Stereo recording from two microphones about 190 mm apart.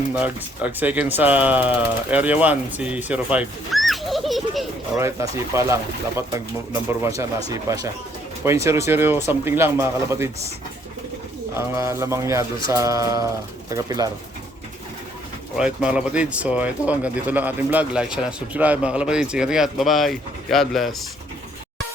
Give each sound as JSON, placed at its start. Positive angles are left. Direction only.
{"t": 0.1, "sound": "speech", "side_deg": -10}
{"t": 5.2, "sound": "speech", "side_deg": -15}
{"t": 11.5, "sound": "speech", "side_deg": -15}
{"t": 15.5, "sound": "speech", "side_deg": -5}